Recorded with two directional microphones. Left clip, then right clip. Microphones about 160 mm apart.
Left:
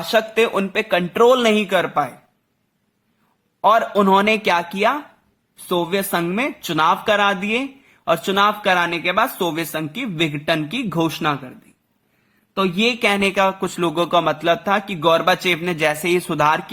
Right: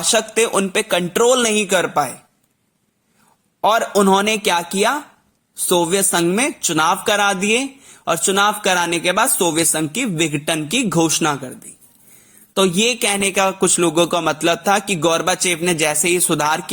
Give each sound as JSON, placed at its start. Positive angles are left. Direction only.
{"t": 0.1, "sound": "speech", "side_deg": -25}
{"t": 3.6, "sound": "speech", "side_deg": -25}
{"t": 12.5, "sound": "speech", "side_deg": -30}